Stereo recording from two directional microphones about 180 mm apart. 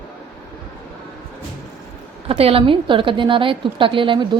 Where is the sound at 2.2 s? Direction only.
30° right (ahead or behind).